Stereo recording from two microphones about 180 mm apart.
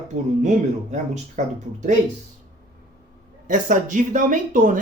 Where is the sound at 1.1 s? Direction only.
40° right (ahead or behind).